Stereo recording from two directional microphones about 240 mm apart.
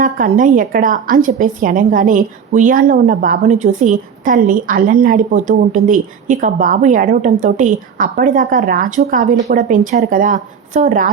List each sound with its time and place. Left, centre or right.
0.0 s a woman's voice: right